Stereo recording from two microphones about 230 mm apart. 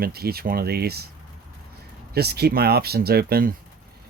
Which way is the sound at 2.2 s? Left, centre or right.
Right.